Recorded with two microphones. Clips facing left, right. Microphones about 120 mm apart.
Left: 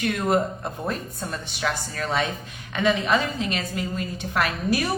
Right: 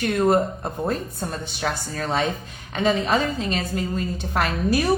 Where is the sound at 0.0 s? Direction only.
40° right (ahead or behind).